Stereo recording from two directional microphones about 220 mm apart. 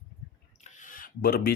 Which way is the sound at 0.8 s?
40° left (ahead or behind).